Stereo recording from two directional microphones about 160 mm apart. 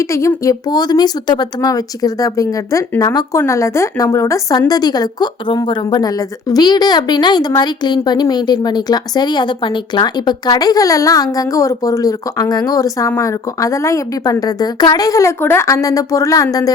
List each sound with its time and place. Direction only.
0.0 s speech: 20° left (ahead or behind)